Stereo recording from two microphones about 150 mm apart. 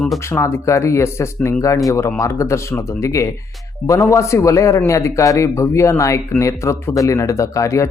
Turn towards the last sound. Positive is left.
turn(degrees=20)  # may be behind; listen again after turning